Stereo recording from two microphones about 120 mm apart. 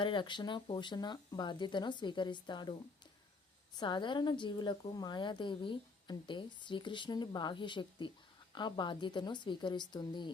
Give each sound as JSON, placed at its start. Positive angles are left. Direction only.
{"t": 0.0, "sound": "a woman's voice", "side_deg": 40}
{"t": 3.8, "sound": "a woman's voice", "side_deg": 40}